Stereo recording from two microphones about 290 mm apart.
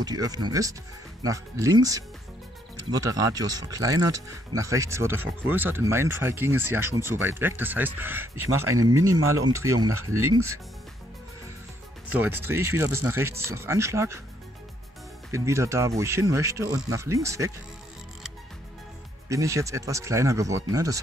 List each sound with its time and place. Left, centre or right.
0.0 s speech: centre
8.5 s speech: right
9.5 s speech: centre
9.8 s speech: right
12.1 s speech: centre
15.3 s speech: centre
19.2 s speech: centre